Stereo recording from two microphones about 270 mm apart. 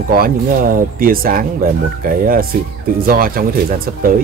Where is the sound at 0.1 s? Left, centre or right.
Right.